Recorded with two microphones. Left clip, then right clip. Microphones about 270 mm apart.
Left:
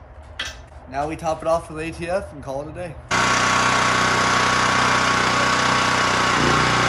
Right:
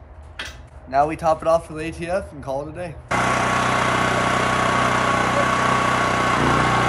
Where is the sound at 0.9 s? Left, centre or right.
Centre.